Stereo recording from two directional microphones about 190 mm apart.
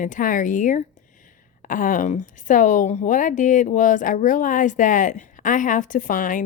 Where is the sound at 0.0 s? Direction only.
45° left (ahead or behind).